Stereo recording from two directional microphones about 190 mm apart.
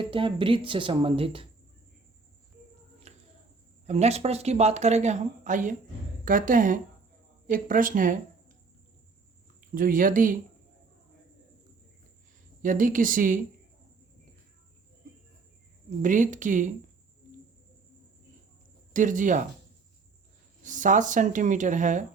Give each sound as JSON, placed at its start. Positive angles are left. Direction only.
{"t": 0.0, "sound": "speech", "side_deg": -25}
{"t": 3.1, "sound": "cricket", "side_deg": -35}
{"t": 3.8, "sound": "speech", "side_deg": -35}
{"t": 9.6, "sound": "speech", "side_deg": -45}
{"t": 12.6, "sound": "speech", "side_deg": -45}
{"t": 16.0, "sound": "speech", "side_deg": -45}
{"t": 18.9, "sound": "speech", "side_deg": -40}
{"t": 20.7, "sound": "speech", "side_deg": -40}